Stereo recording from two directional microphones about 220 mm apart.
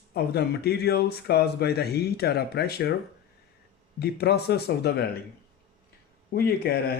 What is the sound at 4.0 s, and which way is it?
Speech, 45° left (ahead or behind).